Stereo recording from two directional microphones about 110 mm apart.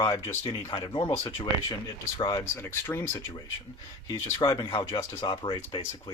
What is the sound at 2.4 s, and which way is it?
Speech, 25° left (ahead or behind).